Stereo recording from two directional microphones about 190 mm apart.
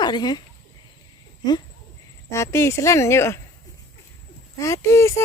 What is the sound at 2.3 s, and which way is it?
Speech, 15° left (ahead or behind).